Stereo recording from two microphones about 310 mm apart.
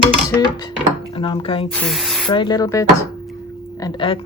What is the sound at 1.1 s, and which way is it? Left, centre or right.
Speech, centre.